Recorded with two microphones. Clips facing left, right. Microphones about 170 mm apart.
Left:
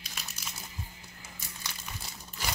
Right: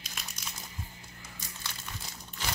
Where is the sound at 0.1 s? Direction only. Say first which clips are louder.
Even; 5° left (ahead or behind).